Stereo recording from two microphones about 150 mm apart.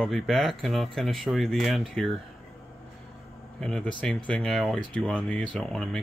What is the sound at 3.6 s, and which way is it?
Speech, 5° left (ahead or behind).